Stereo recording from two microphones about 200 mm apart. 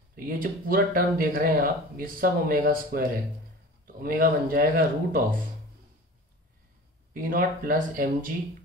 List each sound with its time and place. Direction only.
0.1 s speech: 45° right (ahead or behind)
7.2 s speech: 45° right (ahead or behind)